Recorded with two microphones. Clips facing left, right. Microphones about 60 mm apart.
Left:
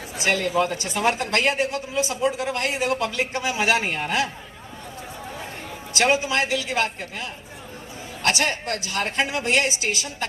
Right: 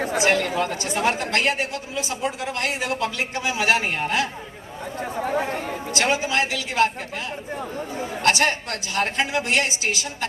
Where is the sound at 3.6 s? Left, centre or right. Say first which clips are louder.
Right 1 dB; right.